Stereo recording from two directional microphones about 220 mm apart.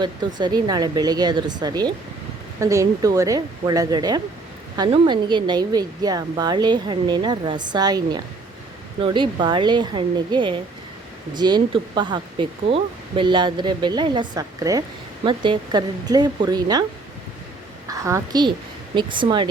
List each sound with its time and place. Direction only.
0.0 s speech: 20° right (ahead or behind)
17.8 s a woman's voice: 15° right (ahead or behind)